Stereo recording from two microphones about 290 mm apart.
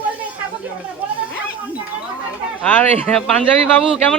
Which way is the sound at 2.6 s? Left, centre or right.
Centre.